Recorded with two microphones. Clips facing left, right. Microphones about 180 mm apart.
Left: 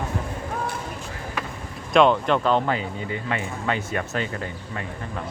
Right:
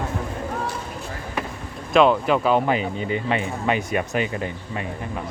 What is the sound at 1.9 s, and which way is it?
Speech, 5° right (ahead or behind).